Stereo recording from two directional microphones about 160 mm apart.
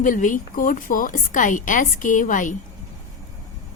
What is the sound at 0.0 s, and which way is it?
A woman's voice, 55° left (ahead or behind).